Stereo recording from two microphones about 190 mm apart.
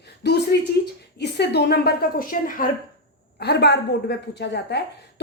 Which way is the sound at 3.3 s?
60° left (ahead or behind).